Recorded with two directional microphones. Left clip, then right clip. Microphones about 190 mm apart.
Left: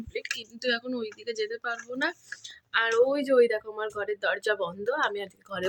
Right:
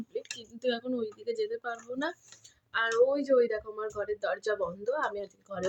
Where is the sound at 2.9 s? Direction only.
25° left (ahead or behind).